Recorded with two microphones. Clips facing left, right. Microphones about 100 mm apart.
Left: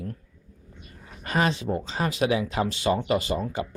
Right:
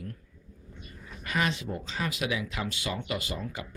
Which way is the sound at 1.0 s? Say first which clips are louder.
Left 5 dB; 40° left (ahead or behind).